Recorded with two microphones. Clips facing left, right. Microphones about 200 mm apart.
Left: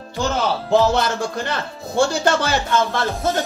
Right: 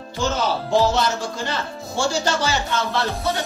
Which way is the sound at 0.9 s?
55° left (ahead or behind).